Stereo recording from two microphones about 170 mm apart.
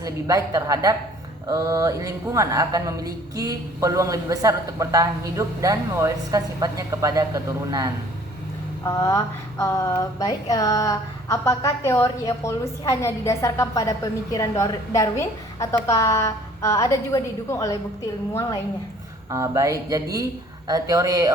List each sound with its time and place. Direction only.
0.0 s a woman's voice: 20° right (ahead or behind)
8.8 s speech: 20° left (ahead or behind)
19.3 s a woman's voice: 15° right (ahead or behind)